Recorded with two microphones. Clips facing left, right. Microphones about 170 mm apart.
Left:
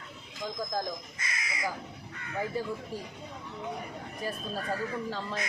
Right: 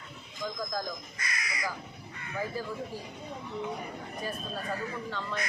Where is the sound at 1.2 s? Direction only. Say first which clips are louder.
Left 1 dB; 25° left (ahead or behind).